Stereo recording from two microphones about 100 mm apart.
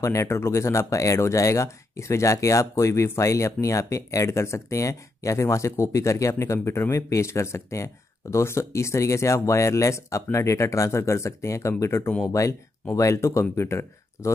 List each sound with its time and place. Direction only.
0.0 s speech: 30° left (ahead or behind)